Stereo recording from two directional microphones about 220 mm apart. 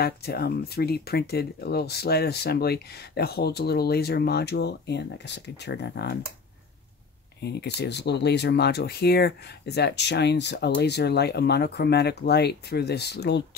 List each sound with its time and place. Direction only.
0.0 s speech: 45° left (ahead or behind)
7.4 s speech: 50° left (ahead or behind)